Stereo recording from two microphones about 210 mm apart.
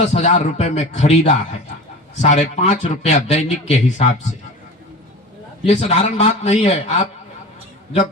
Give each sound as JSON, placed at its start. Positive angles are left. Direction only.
{"t": 0.0, "sound": "speech", "side_deg": 30}
{"t": 5.6, "sound": "speech", "side_deg": 30}